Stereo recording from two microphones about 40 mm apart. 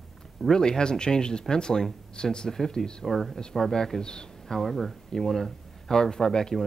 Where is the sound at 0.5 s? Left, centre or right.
Centre.